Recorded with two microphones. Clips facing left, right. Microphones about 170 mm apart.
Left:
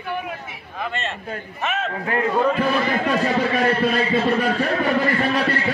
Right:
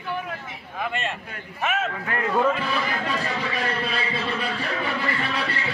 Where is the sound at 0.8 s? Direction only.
10° right (ahead or behind).